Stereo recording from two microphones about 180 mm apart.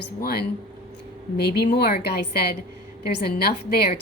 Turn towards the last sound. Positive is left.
turn(degrees=60)  # may be behind; listen again after turning